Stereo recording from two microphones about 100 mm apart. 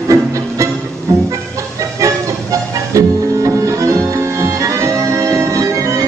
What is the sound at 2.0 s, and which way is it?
Music, 30° right (ahead or behind).